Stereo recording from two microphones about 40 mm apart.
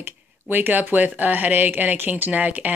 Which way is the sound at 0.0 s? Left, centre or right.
Right.